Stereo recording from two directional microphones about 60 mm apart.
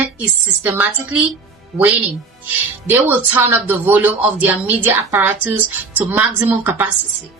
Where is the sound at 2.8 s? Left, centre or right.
Right.